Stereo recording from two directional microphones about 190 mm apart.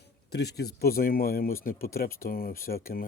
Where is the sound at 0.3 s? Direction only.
60° left (ahead or behind).